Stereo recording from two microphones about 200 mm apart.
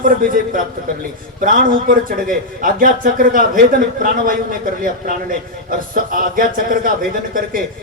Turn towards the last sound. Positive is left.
turn(degrees=-45)  # may be behind; listen again after turning